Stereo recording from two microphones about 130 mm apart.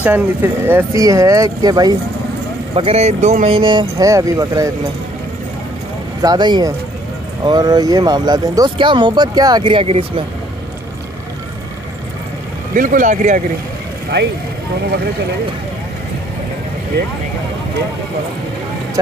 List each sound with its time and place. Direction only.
0.0 s speech: 15° right (ahead or behind); by 2.0 s 30° right (ahead or behind)
2.7 s speech: 50° right (ahead or behind)
3.5 s speech: 35° right (ahead or behind)
4.1 s speech: 25° right (ahead or behind)
6.2 s speech: 35° right (ahead or behind)
12.7 s speech: 90° right; by 13.4 s 70° right (ahead or behind)